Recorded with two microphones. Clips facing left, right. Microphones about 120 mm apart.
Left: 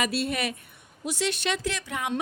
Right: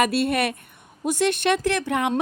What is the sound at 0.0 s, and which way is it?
Speech, 55° right (ahead or behind).